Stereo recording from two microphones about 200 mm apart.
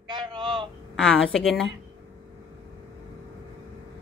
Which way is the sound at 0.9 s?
5° left (ahead or behind).